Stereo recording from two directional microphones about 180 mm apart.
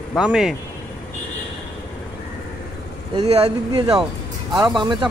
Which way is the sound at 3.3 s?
30° right (ahead or behind).